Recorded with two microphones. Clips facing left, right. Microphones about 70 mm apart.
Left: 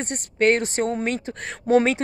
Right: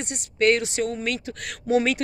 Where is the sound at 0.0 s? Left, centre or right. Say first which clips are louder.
Left 1 dB; left.